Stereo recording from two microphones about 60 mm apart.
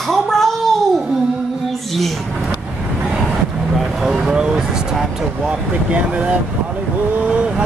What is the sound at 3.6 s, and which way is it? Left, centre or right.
Speech, centre.